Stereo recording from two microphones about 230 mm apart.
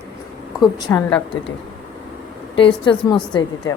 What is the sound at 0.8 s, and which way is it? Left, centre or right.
Speech, centre.